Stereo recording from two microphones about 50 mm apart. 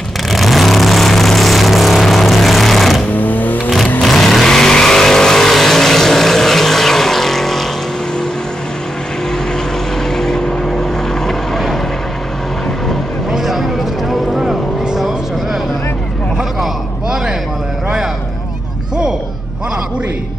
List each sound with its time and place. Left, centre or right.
0.3 s vehicle: centre
3.2 s vehicle: left
4.0 s vehicle: centre
10.1 s vehicle: centre
13.3 s vehicle: centre